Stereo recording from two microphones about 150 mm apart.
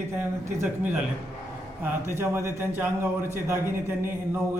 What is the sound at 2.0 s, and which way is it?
Speech, 15° right (ahead or behind).